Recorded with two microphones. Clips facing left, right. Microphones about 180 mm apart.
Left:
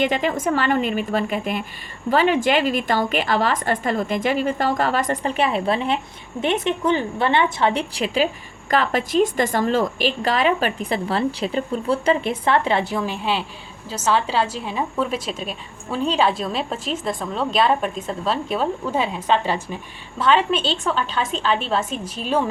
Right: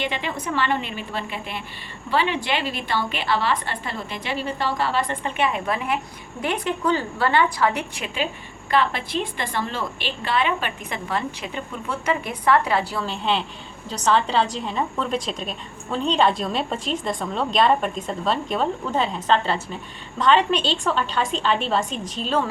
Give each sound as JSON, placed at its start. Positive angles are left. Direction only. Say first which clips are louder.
{"t": 0.0, "sound": "a woman's voice", "louder": "left 7 dB", "side_deg": 45}